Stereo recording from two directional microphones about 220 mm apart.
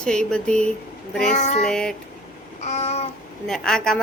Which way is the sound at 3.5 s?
Centre (ahead or behind).